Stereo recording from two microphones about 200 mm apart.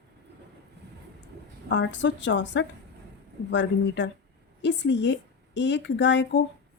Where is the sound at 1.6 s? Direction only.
70° left (ahead or behind).